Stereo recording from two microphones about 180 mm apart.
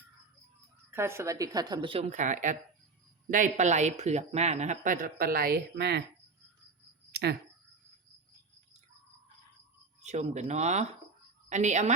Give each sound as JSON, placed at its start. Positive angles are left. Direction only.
{"t": 0.9, "sound": "a woman's voice", "side_deg": -15}
{"t": 2.0, "sound": "speech", "side_deg": -45}
{"t": 7.1, "sound": "a sound", "side_deg": -65}
{"t": 10.0, "sound": "speech", "side_deg": -40}